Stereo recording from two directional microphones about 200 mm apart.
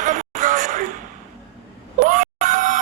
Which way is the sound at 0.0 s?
40° right (ahead or behind).